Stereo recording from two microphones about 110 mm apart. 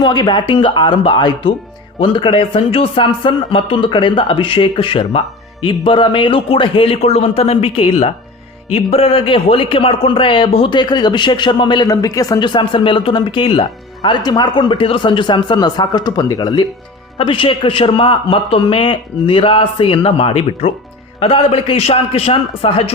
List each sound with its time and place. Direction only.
0.0 s a man's voice: 45° left (ahead or behind)
17.2 s a man's voice: 50° left (ahead or behind)